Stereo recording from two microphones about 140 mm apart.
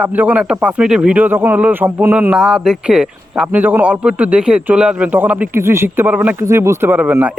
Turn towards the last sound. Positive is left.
turn(degrees=-10)  # may be behind; listen again after turning